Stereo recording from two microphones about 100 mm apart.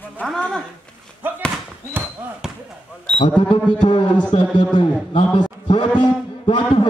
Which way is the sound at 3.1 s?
10° left (ahead or behind).